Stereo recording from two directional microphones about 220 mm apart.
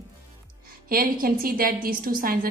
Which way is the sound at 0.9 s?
40° right (ahead or behind).